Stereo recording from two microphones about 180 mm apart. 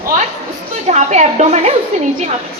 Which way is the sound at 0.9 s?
40° right (ahead or behind).